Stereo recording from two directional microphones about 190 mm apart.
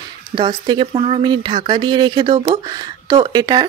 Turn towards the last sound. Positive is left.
turn(degrees=-25)  # may be behind; listen again after turning